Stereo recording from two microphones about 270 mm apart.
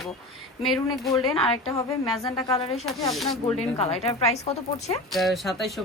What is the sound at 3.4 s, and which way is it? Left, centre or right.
Speech, left.